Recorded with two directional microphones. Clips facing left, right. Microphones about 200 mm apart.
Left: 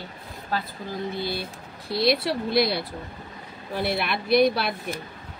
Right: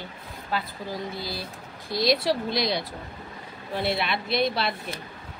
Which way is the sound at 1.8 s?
65° left (ahead or behind).